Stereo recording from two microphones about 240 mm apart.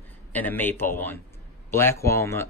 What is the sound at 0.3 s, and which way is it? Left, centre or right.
Speech, centre.